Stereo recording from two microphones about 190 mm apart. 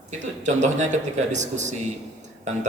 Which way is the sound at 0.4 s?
40° right (ahead or behind).